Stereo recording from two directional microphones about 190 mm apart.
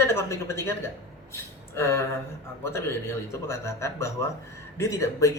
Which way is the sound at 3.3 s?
15° left (ahead or behind).